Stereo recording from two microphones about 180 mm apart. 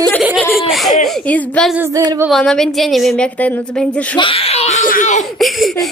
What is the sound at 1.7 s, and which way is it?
Speech, 15° right (ahead or behind).